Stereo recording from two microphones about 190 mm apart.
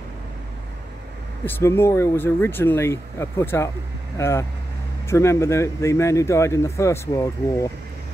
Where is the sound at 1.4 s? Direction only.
15° left (ahead or behind).